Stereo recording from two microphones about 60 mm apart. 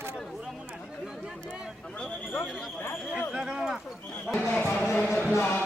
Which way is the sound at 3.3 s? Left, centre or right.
Centre.